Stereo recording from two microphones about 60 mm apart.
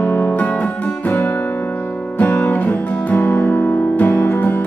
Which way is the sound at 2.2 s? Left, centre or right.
Left.